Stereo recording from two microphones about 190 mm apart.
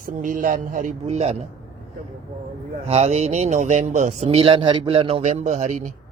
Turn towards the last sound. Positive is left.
turn(degrees=-40)  # may be behind; listen again after turning